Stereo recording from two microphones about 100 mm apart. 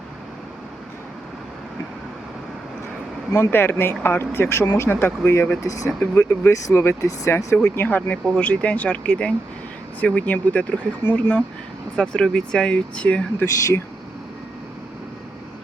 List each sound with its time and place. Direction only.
3.3 s speech: 20° left (ahead or behind)
5.6 s speech: 35° left (ahead or behind)
6.0 s speech: 25° left (ahead or behind)